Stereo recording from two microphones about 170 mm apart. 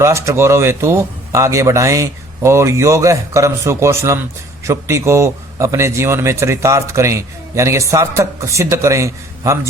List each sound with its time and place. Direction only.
0.0 s a man's voice: 15° right (ahead or behind)